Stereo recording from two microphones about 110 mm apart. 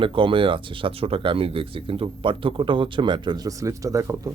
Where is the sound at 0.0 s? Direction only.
50° right (ahead or behind); by 4.4 s 30° right (ahead or behind).